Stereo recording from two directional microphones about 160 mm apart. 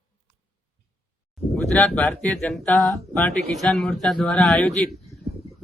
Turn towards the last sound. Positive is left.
turn(degrees=0)  # may be behind; listen again after turning